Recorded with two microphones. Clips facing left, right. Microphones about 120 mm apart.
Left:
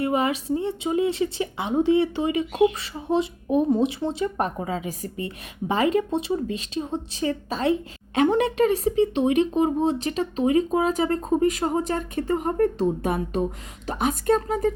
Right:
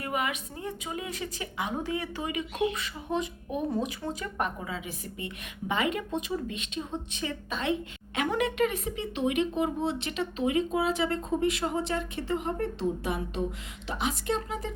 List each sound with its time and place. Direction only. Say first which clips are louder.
0.0 s speech: left 8 dB; 30° left (ahead or behind)